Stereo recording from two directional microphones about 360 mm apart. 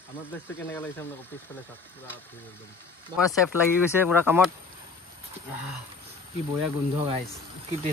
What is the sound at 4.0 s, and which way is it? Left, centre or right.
Speech, centre.